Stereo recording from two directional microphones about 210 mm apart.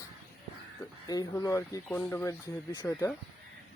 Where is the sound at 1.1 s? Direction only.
15° left (ahead or behind).